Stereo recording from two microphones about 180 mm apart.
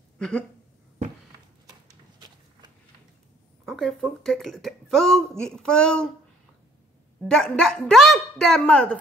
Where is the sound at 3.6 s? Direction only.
5° left (ahead or behind).